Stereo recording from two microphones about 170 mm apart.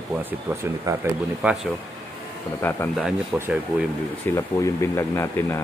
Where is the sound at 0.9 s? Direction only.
20° right (ahead or behind).